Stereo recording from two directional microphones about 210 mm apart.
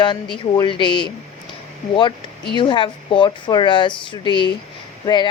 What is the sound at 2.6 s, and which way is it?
A woman's voice, 25° left (ahead or behind).